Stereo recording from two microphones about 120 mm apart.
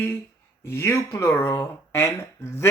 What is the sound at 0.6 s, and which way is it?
Speech, 20° left (ahead or behind).